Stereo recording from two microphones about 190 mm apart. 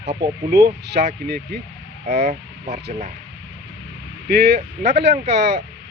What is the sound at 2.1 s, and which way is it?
Speech, 35° right (ahead or behind).